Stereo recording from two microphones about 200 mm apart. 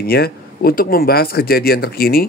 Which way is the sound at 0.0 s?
50° left (ahead or behind).